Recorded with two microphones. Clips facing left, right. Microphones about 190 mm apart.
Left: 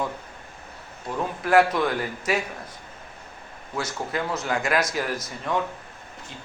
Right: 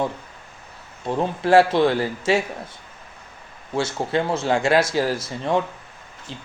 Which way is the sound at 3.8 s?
30° right (ahead or behind).